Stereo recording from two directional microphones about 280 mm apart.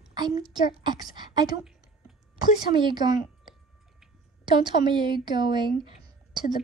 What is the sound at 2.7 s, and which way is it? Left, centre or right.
Speech, centre.